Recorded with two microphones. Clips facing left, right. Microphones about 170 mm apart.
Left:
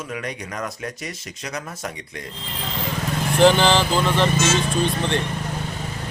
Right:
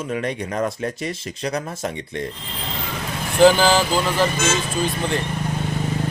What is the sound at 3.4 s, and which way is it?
Speech, 5° right (ahead or behind).